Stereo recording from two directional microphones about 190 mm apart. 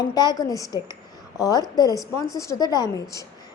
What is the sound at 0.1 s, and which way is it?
A woman's voice, 20° left (ahead or behind).